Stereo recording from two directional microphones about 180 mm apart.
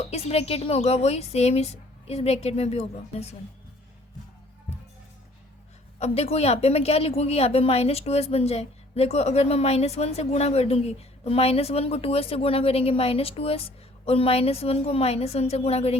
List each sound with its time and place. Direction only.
0.0 s a woman's voice: 35° left (ahead or behind)
6.0 s a woman's voice: 35° left (ahead or behind)